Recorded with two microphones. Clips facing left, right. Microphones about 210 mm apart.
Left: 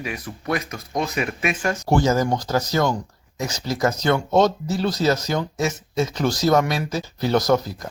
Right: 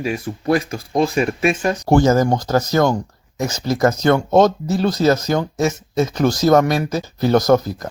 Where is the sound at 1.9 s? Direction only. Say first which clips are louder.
Right 5 dB; 50° right (ahead or behind).